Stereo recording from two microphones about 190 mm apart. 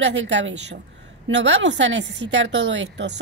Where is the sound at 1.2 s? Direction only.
90° right.